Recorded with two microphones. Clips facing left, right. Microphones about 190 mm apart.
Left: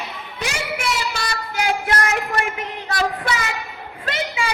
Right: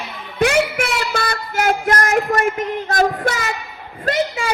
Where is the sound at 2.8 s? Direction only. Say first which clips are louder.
Right 4 dB; 45° right (ahead or behind).